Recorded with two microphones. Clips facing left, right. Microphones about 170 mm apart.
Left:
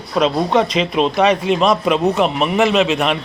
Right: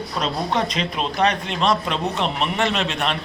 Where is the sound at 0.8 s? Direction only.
90° left.